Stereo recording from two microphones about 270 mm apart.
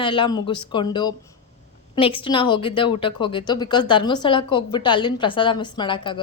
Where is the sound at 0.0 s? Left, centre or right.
Centre.